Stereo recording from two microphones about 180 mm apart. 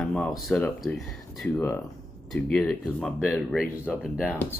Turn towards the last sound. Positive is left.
turn(degrees=-5)  # may be behind; listen again after turning